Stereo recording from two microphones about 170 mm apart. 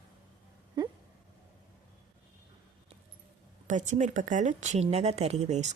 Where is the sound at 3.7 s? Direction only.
45° right (ahead or behind).